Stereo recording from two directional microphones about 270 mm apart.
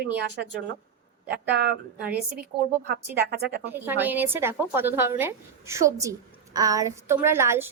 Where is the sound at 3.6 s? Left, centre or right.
Centre.